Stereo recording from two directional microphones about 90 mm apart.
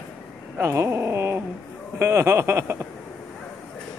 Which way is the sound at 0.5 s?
30° right (ahead or behind).